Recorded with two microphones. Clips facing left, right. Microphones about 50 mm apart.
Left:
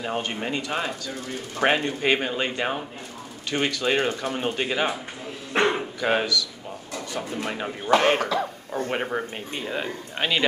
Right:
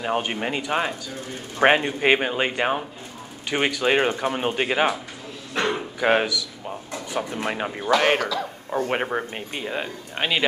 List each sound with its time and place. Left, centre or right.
0.0 s speech: centre
5.5 s speech: left
5.9 s speech: right
9.0 s speech: centre